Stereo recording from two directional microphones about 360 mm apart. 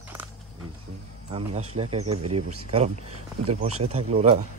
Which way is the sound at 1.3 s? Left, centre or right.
Centre.